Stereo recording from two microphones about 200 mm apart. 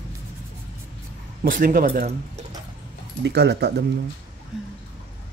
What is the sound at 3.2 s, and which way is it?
Speech, 60° right (ahead or behind).